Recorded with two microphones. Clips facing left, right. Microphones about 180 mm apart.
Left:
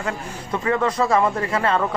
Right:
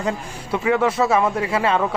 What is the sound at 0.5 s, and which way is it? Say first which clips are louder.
Speech: right 2 dB; 10° right (ahead or behind).